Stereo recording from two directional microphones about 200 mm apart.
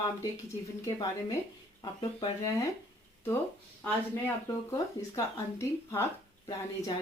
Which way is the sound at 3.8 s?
15° left (ahead or behind).